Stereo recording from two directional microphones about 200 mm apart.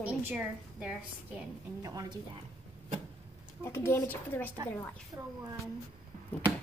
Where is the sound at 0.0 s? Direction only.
10° right (ahead or behind).